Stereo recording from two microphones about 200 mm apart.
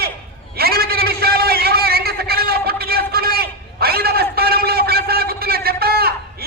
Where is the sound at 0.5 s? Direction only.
50° right (ahead or behind).